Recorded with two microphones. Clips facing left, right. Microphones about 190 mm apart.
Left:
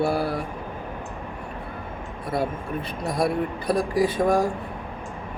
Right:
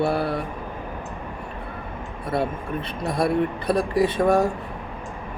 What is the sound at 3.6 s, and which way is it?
Mantra, 25° right (ahead or behind).